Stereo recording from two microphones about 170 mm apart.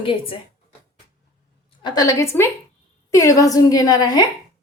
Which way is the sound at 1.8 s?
25° left (ahead or behind).